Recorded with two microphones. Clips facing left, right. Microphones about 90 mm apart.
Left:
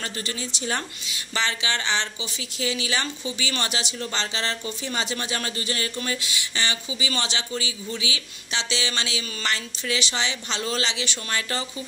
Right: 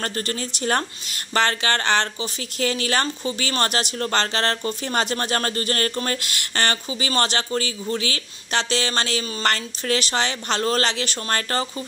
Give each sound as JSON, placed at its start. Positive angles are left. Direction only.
{"t": 0.0, "sound": "speech", "side_deg": -50}